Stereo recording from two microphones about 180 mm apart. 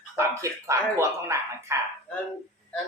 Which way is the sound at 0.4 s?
15° right (ahead or behind).